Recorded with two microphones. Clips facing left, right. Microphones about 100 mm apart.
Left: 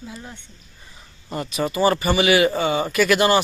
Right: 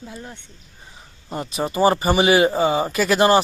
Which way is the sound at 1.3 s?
30° right (ahead or behind).